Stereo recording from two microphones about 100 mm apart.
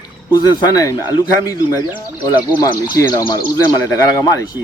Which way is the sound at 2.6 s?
40° left (ahead or behind).